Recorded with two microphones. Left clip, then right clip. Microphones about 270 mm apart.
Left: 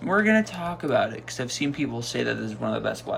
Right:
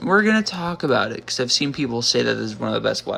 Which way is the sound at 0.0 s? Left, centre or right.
Centre.